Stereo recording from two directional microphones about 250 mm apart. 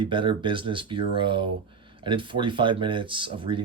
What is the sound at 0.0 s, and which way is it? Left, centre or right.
Speech, centre.